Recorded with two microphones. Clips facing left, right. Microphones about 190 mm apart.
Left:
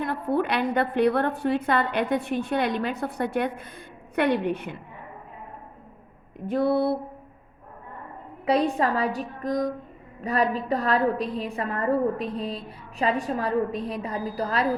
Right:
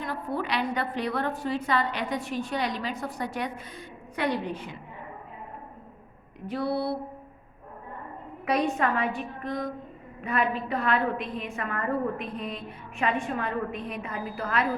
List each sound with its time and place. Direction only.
0.0 s a woman's voice: 55° left (ahead or behind)
6.5 s a sound: 50° left (ahead or behind)
8.4 s a woman's voice: 30° left (ahead or behind)